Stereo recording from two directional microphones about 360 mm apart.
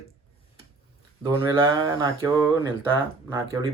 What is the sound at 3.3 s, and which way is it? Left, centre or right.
Speech, centre.